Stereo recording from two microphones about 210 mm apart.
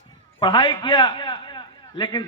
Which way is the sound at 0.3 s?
25° left (ahead or behind).